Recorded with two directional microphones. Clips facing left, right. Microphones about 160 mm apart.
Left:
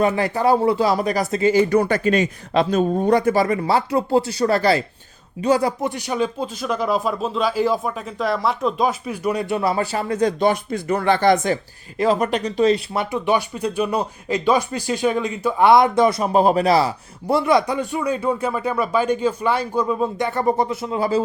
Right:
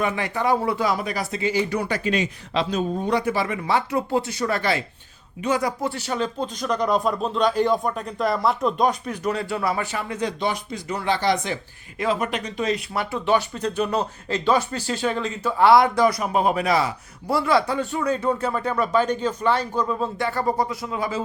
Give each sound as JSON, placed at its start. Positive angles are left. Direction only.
{"t": 0.0, "sound": "speech", "side_deg": 35}
{"t": 5.8, "sound": "speech", "side_deg": 15}